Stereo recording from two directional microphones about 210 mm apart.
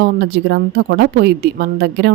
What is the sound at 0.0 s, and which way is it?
Speech, 55° right (ahead or behind).